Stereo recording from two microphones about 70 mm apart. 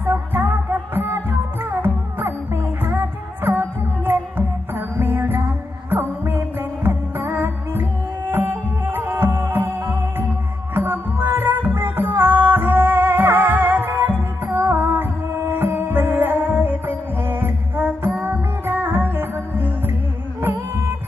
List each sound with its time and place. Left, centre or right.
0.0 s music: right